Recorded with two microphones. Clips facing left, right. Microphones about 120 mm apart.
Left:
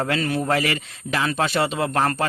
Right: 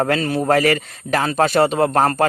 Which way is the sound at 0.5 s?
45° right (ahead or behind).